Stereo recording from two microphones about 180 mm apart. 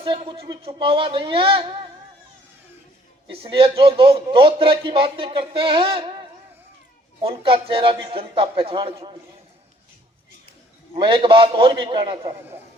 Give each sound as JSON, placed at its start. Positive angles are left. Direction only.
{"t": 0.0, "sound": "a man's voice", "side_deg": -30}
{"t": 3.2, "sound": "a man's voice", "side_deg": -30}
{"t": 7.2, "sound": "a man's voice", "side_deg": -30}
{"t": 10.9, "sound": "a man's voice", "side_deg": -25}